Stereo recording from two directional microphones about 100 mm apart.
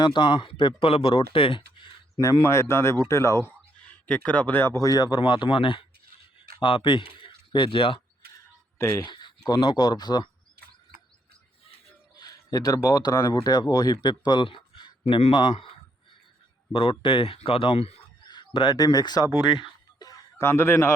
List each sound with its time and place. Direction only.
0.0 s speech: 50° left (ahead or behind)
2.4 s speech: 30° left (ahead or behind)
3.8 s speech: 10° left (ahead or behind); by 5.2 s 40° left (ahead or behind)
5.2 s speech: 55° left (ahead or behind)
8.8 s speech: 25° left (ahead or behind)
9.0 s a sound: 50° left (ahead or behind)
9.6 s speech: 50° left (ahead or behind)
12.1 s speech: 40° left (ahead or behind); by 15.7 s 60° left (ahead or behind)
16.7 s speech: 60° left (ahead or behind); by 18.0 s 90° left
18.2 s speech: 50° left (ahead or behind)
20.0 s a sound: 40° left (ahead or behind)
20.4 s speech: 25° left (ahead or behind)